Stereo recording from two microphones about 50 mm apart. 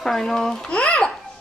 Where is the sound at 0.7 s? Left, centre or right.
Left.